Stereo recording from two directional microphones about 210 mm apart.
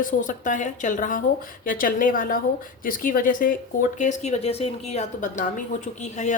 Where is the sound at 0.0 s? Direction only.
40° left (ahead or behind).